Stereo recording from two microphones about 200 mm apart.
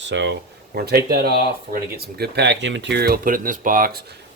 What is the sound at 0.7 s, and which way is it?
Speech, 50° right (ahead or behind).